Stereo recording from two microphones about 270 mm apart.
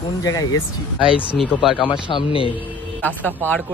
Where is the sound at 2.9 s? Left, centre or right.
Centre.